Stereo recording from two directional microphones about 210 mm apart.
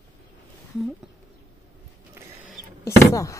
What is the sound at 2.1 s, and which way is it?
Printer, 10° right (ahead or behind).